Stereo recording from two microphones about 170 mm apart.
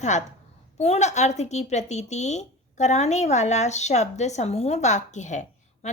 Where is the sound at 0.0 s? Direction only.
45° left (ahead or behind).